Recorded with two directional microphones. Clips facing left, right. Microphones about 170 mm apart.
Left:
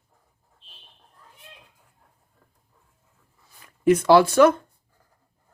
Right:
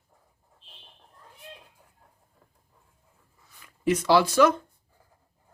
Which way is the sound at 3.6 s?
50° left (ahead or behind).